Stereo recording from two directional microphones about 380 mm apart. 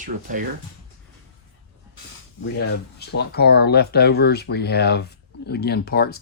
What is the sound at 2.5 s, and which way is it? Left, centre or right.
Speech, left.